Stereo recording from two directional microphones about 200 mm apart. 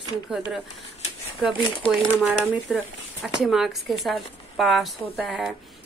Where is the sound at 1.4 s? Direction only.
Centre (ahead or behind).